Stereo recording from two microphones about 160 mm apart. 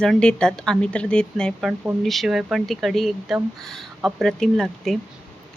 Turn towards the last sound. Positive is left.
turn(degrees=0)  # may be behind; listen again after turning